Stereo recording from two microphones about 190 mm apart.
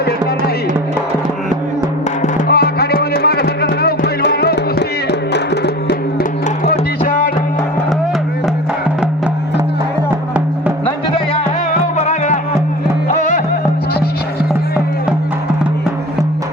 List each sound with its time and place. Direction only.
2.5 s music: 55° left (ahead or behind)
6.7 s music: 50° left (ahead or behind)
11.9 s music: 40° left (ahead or behind)